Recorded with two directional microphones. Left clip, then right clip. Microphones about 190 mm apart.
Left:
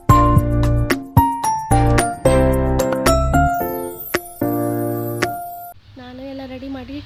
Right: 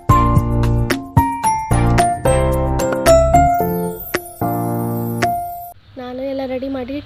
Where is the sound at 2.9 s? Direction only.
Centre (ahead or behind).